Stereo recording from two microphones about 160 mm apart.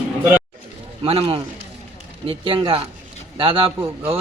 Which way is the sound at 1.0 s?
35° right (ahead or behind).